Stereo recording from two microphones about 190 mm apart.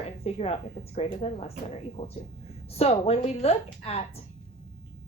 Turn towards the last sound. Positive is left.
turn(degrees=30)  # may be behind; listen again after turning